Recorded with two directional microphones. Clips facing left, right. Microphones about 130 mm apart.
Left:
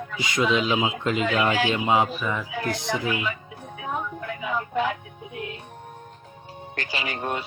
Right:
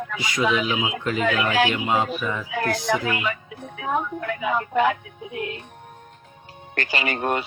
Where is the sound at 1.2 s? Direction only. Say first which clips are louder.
Right 2 dB; 70° right (ahead or behind).